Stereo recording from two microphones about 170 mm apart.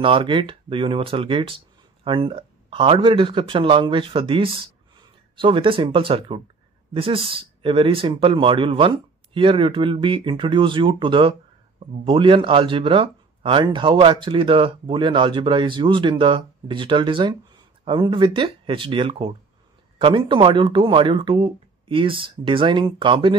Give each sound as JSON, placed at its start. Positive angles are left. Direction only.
{"t": 0.0, "sound": "speech", "side_deg": -30}